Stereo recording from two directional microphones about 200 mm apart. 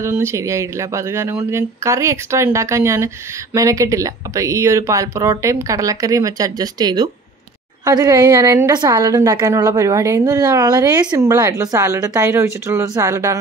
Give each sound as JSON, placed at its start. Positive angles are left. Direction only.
{"t": 0.0, "sound": "a woman's voice", "side_deg": -15}